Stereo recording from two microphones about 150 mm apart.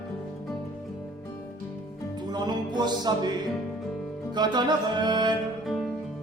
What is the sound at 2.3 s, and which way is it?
Music, 30° right (ahead or behind).